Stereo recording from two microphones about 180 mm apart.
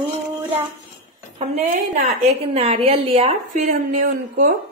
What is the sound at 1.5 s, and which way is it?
A woman's voice, 35° right (ahead or behind).